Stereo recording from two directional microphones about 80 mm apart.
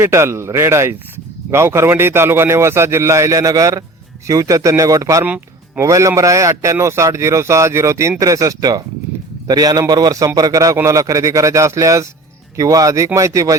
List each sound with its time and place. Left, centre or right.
0.0 s a man's voice: right
5.2 s a sound: right
5.8 s a man's voice: right